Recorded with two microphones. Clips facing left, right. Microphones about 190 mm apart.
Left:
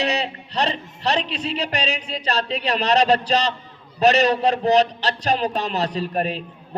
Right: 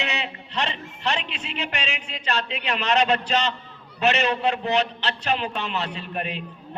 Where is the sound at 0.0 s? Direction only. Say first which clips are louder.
Left 7 dB; 35° left (ahead or behind).